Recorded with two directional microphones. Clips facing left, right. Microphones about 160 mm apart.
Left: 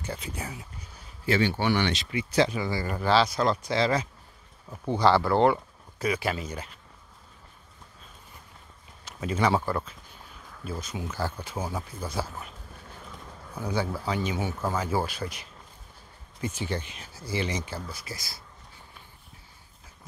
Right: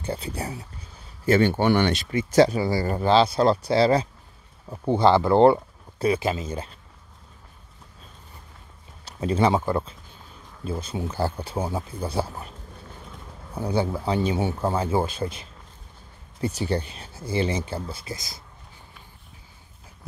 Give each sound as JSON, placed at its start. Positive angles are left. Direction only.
{"t": 0.0, "sound": "speech", "side_deg": -30}
{"t": 1.2, "sound": "speech", "side_deg": -50}
{"t": 3.0, "sound": "speech", "side_deg": -25}
{"t": 9.0, "sound": "speech", "side_deg": -30}
{"t": 13.6, "sound": "speech", "side_deg": -30}